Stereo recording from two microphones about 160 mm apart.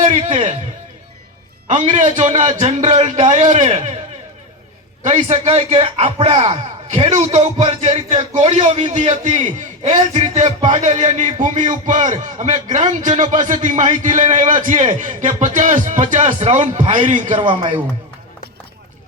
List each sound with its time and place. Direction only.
0.1 s a man's voice: 45° right (ahead or behind)
1.7 s speech: 30° right (ahead or behind)
2.1 s a man's voice: 50° right (ahead or behind)
3.8 s speech: 35° right (ahead or behind)
5.0 s speech: 45° right (ahead or behind)
8.1 s a man's voice: 50° right (ahead or behind)
16.5 s a man's voice: 30° right (ahead or behind)